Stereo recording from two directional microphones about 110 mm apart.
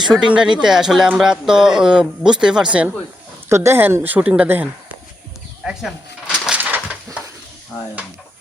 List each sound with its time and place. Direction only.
0.0 s speech: 5° right (ahead or behind)
3.5 s a woman's voice: 25° right (ahead or behind)
5.6 s a sound: 5° right (ahead or behind)